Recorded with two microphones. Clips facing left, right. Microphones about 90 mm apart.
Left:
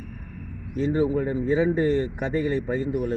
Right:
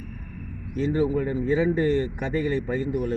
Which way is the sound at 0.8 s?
25° left (ahead or behind).